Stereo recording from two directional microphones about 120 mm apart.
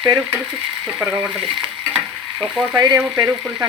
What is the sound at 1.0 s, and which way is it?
Stir, 25° right (ahead or behind).